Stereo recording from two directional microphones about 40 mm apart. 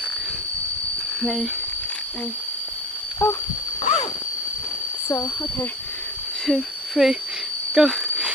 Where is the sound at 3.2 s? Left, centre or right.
Left.